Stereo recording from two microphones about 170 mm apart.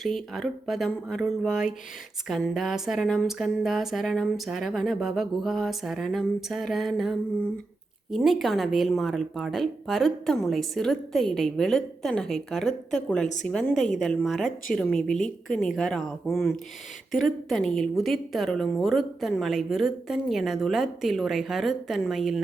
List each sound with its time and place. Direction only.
0.0 s a woman's voice: centre (ahead or behind)
13.2 s a woman's voice: 45° left (ahead or behind)
13.5 s a woman's voice: 5° left (ahead or behind)